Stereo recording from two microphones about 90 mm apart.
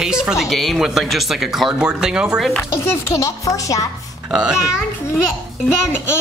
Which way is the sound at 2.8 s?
35° left (ahead or behind).